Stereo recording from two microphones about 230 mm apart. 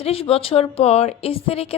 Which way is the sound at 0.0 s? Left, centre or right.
Left.